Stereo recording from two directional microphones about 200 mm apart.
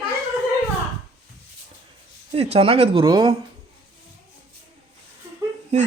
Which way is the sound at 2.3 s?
30° right (ahead or behind).